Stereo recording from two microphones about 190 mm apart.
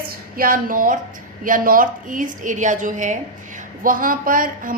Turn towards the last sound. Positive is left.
turn(degrees=-45)  # may be behind; listen again after turning